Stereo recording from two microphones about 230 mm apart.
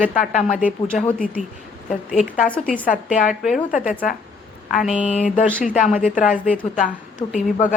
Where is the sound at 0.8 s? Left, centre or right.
Centre.